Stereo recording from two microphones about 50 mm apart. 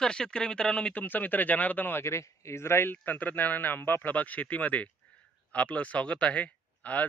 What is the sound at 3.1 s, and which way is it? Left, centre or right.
Speech, left.